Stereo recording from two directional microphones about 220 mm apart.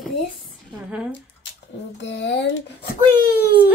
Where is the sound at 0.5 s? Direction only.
Centre (ahead or behind).